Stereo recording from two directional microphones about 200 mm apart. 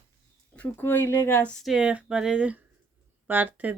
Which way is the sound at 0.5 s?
10° left (ahead or behind).